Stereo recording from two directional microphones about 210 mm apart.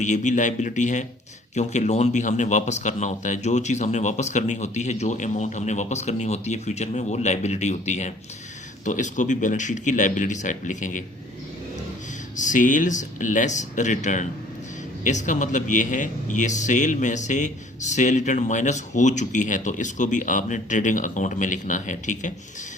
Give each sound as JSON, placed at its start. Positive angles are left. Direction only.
{"t": 0.0, "sound": "a man's voice", "side_deg": 35}
{"t": 12.4, "sound": "a man's voice", "side_deg": 35}